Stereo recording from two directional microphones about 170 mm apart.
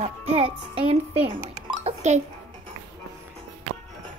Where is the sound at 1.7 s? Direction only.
40° right (ahead or behind).